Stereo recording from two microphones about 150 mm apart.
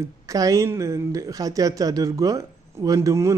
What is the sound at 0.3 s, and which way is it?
A man's voice, 20° right (ahead or behind).